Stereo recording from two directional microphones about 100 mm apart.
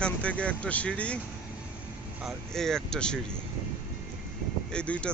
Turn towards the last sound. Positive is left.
turn(degrees=10)  # may be behind; listen again after turning